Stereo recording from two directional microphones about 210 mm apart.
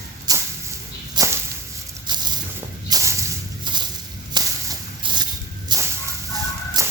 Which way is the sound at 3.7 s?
20° right (ahead or behind).